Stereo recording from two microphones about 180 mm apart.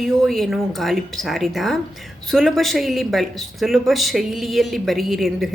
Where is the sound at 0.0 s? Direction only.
Centre (ahead or behind).